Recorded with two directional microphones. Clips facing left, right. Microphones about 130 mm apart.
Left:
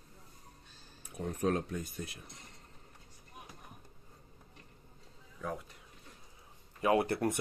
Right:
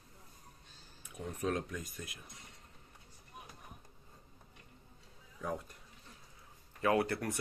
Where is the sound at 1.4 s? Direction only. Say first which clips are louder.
Left 4 dB; 35° left (ahead or behind).